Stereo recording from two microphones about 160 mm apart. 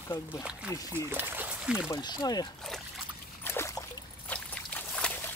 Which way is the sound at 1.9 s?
25° left (ahead or behind).